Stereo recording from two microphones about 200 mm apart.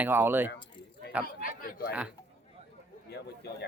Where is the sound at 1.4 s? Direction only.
45° left (ahead or behind).